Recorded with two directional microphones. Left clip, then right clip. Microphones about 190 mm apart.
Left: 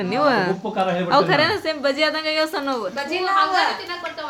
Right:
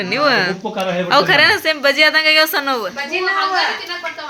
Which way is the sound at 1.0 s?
5° left (ahead or behind).